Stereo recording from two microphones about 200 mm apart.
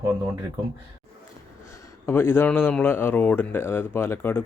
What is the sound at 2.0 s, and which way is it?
Speech, 10° left (ahead or behind).